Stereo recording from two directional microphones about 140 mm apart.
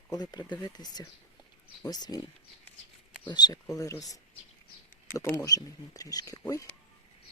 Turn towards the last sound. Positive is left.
turn(degrees=20)  # may be behind; listen again after turning